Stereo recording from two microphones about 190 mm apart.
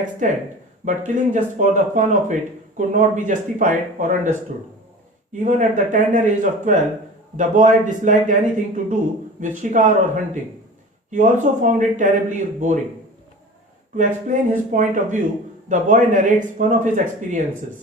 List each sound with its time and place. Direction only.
0.2 s a man's voice: 45° right (ahead or behind)
11.1 s a man's voice: 40° right (ahead or behind)
13.9 s a man's voice: 40° right (ahead or behind)